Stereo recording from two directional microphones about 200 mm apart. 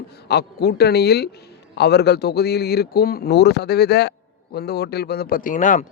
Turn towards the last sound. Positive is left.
turn(degrees=40)  # may be behind; listen again after turning